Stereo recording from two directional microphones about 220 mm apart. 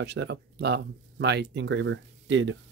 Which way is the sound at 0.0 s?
50° right (ahead or behind).